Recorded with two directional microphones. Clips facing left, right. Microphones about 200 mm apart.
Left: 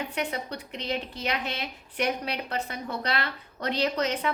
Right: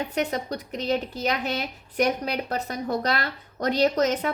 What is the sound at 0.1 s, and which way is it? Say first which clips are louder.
A woman's voice: right 5 dB; 40° right (ahead or behind).